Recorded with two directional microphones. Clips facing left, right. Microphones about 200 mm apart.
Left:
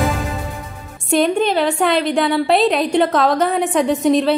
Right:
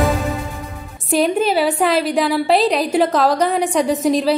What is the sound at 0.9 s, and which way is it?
A woman's voice, centre (ahead or behind).